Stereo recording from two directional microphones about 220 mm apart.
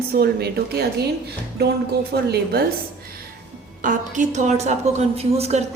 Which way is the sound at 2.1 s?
45° right (ahead or behind).